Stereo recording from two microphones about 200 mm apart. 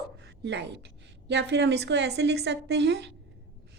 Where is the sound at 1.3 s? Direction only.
55° right (ahead or behind).